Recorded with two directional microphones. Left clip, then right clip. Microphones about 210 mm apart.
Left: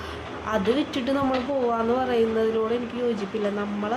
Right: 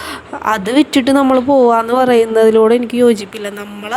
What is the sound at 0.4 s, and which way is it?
A woman's voice, 50° right (ahead or behind).